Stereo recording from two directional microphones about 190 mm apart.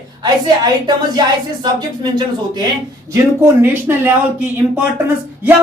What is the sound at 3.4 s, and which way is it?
A man's voice, 10° right (ahead or behind).